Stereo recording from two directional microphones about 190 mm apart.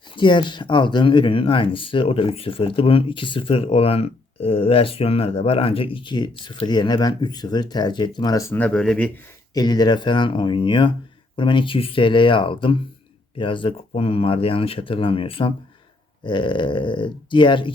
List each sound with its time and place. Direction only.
0.2 s speech: 25° left (ahead or behind); by 9.1 s 5° left (ahead or behind)
9.6 s speech: 20° left (ahead or behind)